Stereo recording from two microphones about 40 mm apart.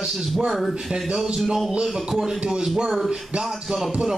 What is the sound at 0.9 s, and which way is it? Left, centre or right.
Speech, right.